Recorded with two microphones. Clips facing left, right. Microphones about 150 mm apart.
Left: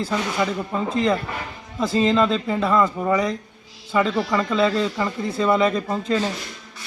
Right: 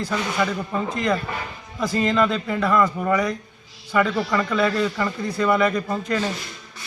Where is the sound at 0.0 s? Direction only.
25° left (ahead or behind).